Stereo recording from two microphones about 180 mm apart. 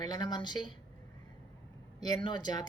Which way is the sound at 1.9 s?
20° left (ahead or behind).